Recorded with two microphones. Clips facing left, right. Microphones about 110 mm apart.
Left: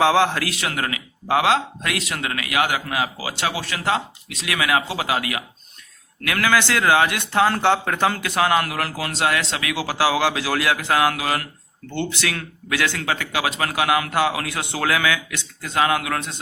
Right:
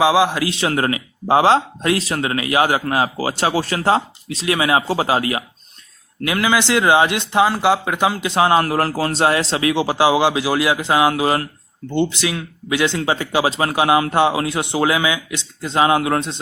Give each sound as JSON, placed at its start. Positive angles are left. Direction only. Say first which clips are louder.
{"t": 0.0, "sound": "speech", "louder": "right 2 dB", "side_deg": -10}
{"t": 0.5, "sound": "speech", "louder": "right 7 dB", "side_deg": -30}
{"t": 6.2, "sound": "a man's voice", "louder": "right 2 dB", "side_deg": -20}
{"t": 11.9, "sound": "a man's voice", "louder": "right 6 dB", "side_deg": -15}